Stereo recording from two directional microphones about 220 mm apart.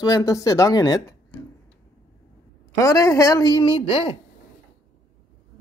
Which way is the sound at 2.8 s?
15° left (ahead or behind).